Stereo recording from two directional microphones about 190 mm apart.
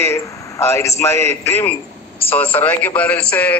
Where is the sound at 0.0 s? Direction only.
15° left (ahead or behind).